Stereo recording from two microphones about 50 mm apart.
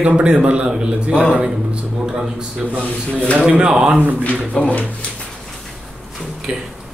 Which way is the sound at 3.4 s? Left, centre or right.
Centre.